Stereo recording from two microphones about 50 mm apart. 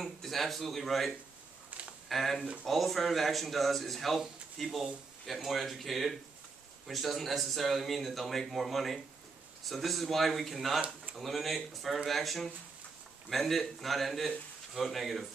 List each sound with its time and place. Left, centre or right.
0.0 s speech: centre
1.7 s a sound: right
2.0 s speech: centre